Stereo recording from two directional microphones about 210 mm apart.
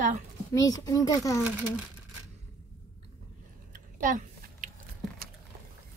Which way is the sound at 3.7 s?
40° right (ahead or behind).